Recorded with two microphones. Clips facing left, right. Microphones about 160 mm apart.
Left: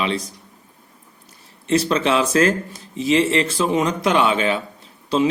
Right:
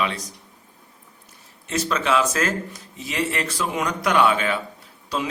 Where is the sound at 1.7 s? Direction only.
30° left (ahead or behind).